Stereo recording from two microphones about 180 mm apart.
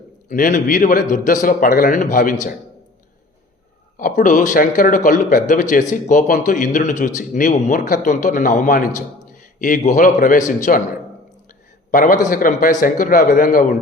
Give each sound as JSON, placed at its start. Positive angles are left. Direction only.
{"t": 0.3, "sound": "a man's voice", "side_deg": 45}
{"t": 3.9, "sound": "a man's voice", "side_deg": 50}
{"t": 11.9, "sound": "a man's voice", "side_deg": 50}